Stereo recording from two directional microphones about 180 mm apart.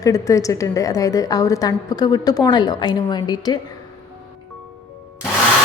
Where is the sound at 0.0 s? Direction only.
20° left (ahead or behind).